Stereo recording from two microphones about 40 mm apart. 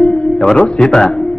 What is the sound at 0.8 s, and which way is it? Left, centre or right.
Speech, centre.